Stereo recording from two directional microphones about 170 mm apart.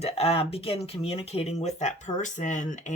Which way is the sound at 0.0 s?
35° left (ahead or behind).